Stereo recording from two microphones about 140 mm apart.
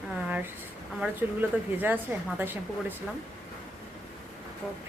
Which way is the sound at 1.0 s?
15° right (ahead or behind).